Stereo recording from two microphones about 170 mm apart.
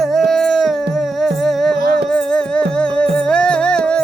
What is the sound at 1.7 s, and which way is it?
Music, 65° right (ahead or behind).